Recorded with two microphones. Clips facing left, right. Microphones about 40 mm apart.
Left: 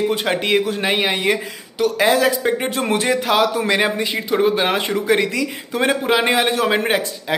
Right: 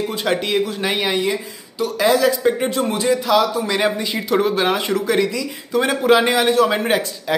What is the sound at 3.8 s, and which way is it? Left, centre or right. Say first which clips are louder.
Speech: even; left.